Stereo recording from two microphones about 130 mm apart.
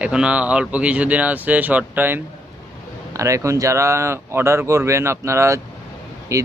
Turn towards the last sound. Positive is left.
turn(degrees=-25)  # may be behind; listen again after turning